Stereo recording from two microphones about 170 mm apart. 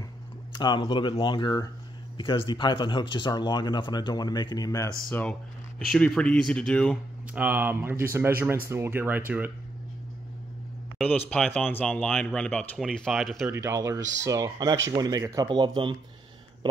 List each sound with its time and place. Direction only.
0.6 s speech: 25° left (ahead or behind)
5.9 s speech: 5° left (ahead or behind)
7.3 s speech: 10° right (ahead or behind)
11.1 s speech: 5° left (ahead or behind)
13.5 s speech: 15° right (ahead or behind)